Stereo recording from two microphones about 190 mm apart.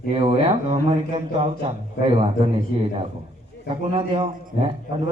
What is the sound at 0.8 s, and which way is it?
Speech, 30° right (ahead or behind).